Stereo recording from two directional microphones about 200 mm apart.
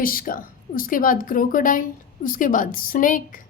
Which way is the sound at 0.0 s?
45° left (ahead or behind).